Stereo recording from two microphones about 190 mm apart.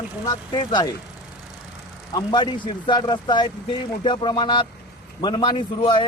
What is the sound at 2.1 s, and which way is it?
Speech, 25° left (ahead or behind).